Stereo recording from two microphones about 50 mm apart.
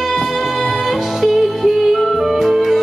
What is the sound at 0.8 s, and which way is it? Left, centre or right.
Music, centre.